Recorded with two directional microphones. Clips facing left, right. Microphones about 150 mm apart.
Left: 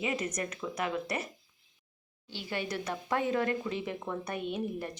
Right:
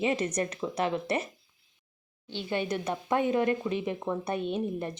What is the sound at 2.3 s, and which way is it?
Speech, 20° right (ahead or behind).